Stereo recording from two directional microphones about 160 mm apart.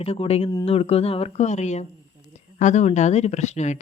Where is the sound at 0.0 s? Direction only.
40° left (ahead or behind).